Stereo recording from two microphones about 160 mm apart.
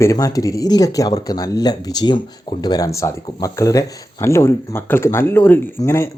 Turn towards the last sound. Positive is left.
turn(degrees=15)  # may be behind; listen again after turning